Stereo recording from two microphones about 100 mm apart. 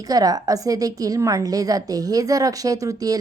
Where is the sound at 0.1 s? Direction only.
40° right (ahead or behind).